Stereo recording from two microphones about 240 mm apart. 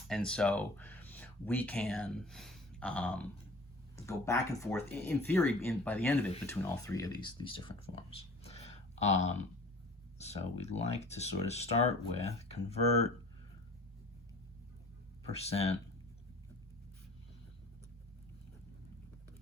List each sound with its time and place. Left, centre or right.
0.1 s speech: centre
8.4 s a sound: left
10.2 s speech: left
15.3 s speech: left